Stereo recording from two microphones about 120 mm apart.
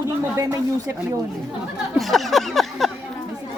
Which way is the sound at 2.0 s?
Centre (ahead or behind).